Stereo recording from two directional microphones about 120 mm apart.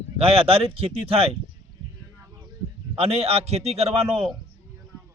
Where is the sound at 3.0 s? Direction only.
55° right (ahead or behind).